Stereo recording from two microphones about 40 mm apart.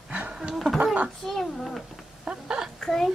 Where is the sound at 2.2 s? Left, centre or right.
Right.